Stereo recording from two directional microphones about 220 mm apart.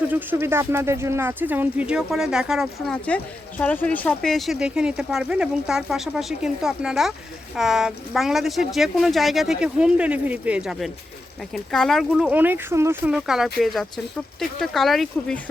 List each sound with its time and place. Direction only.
0.1 s speech: 10° right (ahead or behind)